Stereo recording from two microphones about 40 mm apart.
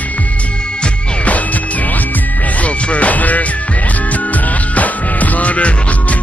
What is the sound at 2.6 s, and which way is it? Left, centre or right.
Music, left.